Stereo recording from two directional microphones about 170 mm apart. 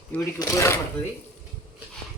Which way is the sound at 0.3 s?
20° left (ahead or behind).